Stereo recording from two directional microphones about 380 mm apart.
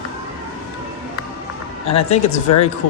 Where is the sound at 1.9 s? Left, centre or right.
Centre.